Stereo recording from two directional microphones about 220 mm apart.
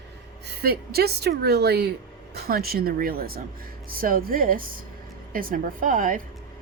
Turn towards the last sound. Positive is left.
turn(degrees=-40)  # may be behind; listen again after turning